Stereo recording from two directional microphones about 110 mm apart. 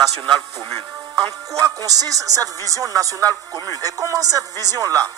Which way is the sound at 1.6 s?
35° right (ahead or behind).